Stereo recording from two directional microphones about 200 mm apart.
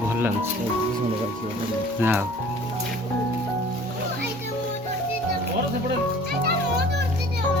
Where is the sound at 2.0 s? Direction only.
10° right (ahead or behind).